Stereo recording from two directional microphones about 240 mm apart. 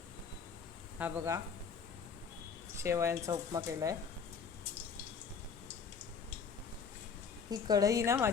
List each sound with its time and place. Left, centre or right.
0.9 s speech: centre
2.7 s speech: centre
7.5 s speech: centre